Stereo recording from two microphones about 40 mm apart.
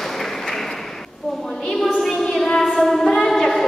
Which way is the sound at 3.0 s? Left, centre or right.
Centre.